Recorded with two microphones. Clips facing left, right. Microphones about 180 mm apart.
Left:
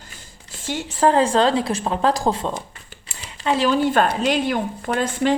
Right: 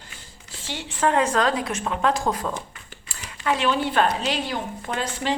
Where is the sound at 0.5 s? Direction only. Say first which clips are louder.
Left 6 dB; 50° left (ahead or behind).